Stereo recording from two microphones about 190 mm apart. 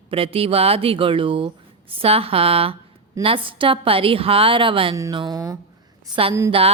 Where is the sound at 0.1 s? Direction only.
30° right (ahead or behind).